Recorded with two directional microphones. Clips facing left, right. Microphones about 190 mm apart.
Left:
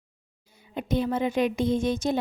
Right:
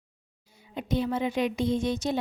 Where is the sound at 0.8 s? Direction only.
50° left (ahead or behind).